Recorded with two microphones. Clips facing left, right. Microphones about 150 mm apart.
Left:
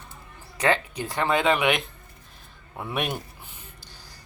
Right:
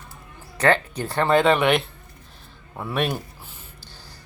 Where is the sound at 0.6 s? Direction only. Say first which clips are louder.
Right 4 dB; 35° right (ahead or behind).